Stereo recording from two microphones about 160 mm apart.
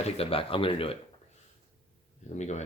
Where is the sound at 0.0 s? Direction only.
35° left (ahead or behind).